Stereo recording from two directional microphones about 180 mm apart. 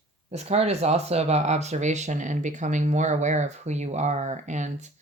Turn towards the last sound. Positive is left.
turn(degrees=-40)  # may be behind; listen again after turning